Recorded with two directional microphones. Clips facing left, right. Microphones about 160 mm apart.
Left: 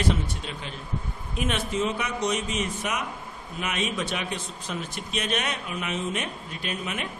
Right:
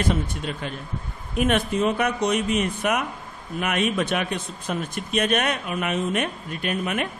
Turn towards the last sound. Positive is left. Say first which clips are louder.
# right 6 dB
turn(degrees=-55)  # may be behind; listen again after turning